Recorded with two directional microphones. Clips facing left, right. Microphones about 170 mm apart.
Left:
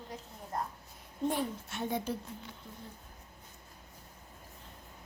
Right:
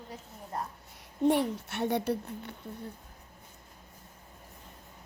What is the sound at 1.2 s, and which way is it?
A woman's voice, 70° right (ahead or behind).